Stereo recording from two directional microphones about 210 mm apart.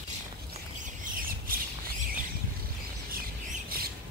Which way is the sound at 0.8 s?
45° right (ahead or behind).